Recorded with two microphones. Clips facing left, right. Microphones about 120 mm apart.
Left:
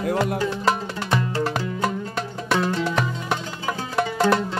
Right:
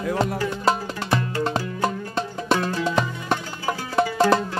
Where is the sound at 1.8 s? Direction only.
25° right (ahead or behind).